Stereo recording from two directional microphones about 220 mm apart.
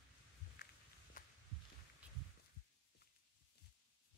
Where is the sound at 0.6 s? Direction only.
45° left (ahead or behind).